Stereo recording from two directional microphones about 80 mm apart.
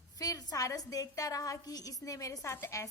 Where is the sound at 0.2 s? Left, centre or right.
Left.